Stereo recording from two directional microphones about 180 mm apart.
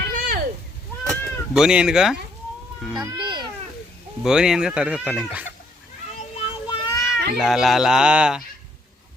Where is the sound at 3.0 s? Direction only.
25° right (ahead or behind).